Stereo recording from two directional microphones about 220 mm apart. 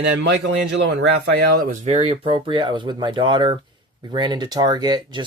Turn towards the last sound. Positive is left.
turn(degrees=-20)  # may be behind; listen again after turning